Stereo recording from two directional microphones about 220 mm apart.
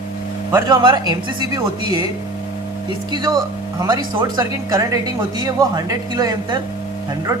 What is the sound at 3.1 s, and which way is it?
Speech, 15° right (ahead or behind).